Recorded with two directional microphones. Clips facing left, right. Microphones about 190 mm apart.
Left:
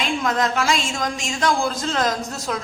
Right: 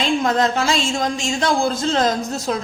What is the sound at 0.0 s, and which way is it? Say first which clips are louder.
A woman's voice: right 4 dB; 30° right (ahead or behind).